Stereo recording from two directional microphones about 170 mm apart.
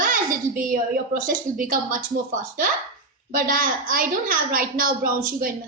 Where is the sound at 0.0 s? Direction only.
55° right (ahead or behind).